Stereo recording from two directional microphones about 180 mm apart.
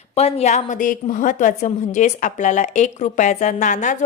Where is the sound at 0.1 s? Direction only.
35° left (ahead or behind).